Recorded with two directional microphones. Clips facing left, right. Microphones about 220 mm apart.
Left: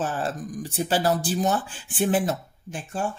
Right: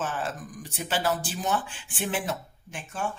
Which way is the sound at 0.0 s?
35° left (ahead or behind).